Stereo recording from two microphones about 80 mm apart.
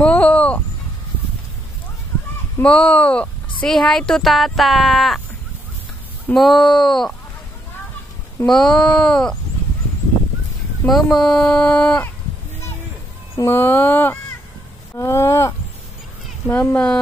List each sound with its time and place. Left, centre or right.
0.0 s a sound: centre
2.6 s speech: centre
6.3 s speech: centre
8.5 s speech: centre
10.9 s speech: centre
13.5 s speech: left
15.0 s a sound: left
16.4 s speech: centre